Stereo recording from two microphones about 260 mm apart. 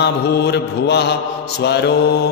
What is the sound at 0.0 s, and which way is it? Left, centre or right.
Mantra, left.